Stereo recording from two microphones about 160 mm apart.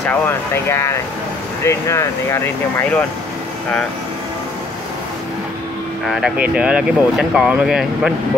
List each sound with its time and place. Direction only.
0.0 s speech: 15° left (ahead or behind)
6.0 s speech: 5° right (ahead or behind)